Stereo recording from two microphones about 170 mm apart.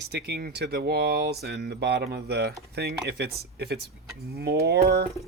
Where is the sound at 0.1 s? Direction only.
75° right (ahead or behind).